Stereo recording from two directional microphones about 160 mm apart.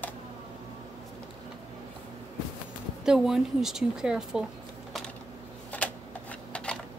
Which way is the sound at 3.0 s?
5° right (ahead or behind).